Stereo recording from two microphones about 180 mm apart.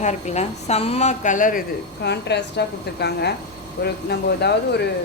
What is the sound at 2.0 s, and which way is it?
Speech, 70° left (ahead or behind).